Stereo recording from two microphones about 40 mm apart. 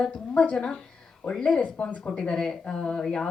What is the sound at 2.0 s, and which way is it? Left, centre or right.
Speech, centre.